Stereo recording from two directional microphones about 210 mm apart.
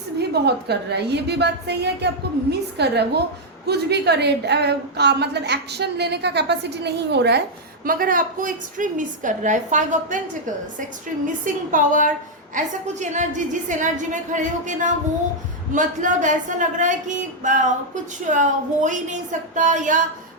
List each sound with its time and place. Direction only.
0.2 s a woman's voice: 50° right (ahead or behind)
7.9 s speech: 40° right (ahead or behind)
11.4 s speech: 40° right (ahead or behind)